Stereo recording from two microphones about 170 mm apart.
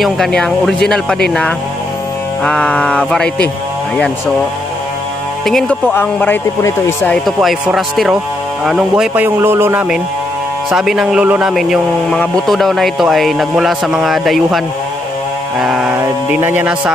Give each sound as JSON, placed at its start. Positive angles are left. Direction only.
{"t": 0.0, "sound": "speech", "side_deg": 5}
{"t": 2.4, "sound": "speech", "side_deg": 5}
{"t": 5.4, "sound": "speech", "side_deg": 0}
{"t": 7.2, "sound": "speech", "side_deg": 0}
{"t": 15.6, "sound": "speech", "side_deg": -5}